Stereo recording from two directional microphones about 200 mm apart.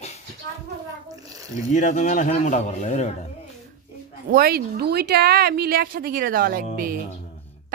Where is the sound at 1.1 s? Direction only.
20° right (ahead or behind).